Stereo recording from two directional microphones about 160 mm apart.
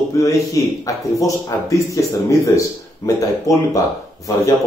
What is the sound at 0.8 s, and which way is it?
Speech, 20° left (ahead or behind).